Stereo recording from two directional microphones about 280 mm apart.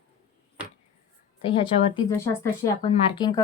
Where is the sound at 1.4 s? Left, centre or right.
Centre.